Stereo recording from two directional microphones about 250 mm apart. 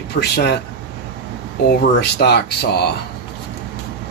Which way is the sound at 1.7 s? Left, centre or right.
Left.